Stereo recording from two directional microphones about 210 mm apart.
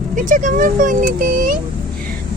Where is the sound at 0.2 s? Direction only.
40° right (ahead or behind).